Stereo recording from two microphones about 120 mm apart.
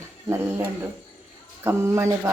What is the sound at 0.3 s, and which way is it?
Speech, 20° right (ahead or behind).